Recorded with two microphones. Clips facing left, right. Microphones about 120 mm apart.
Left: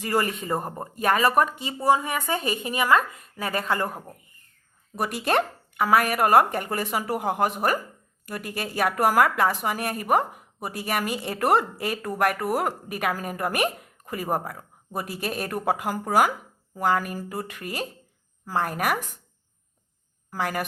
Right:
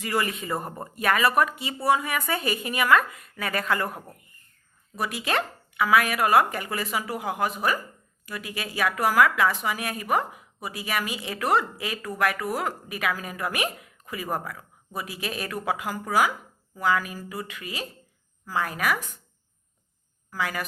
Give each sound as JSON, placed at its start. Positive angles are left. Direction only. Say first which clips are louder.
{"t": 0.0, "sound": "speech", "louder": "left 2 dB", "side_deg": 40}
{"t": 0.7, "sound": "speech", "louder": "left 2 dB", "side_deg": 15}
{"t": 0.9, "sound": "speech", "louder": "left 1 dB", "side_deg": 40}
{"t": 4.9, "sound": "speech", "louder": "left 4 dB", "side_deg": 50}
{"t": 20.3, "sound": "speech", "louder": "left 2 dB", "side_deg": 50}